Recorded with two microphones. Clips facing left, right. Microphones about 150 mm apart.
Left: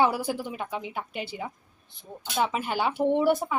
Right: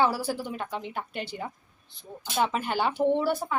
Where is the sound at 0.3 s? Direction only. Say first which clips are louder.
Left 1 dB; 10° left (ahead or behind).